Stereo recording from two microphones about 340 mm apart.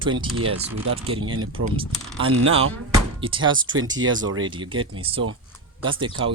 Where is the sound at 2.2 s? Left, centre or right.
Right.